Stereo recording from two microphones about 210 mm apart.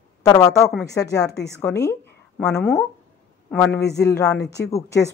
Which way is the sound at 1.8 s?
10° left (ahead or behind).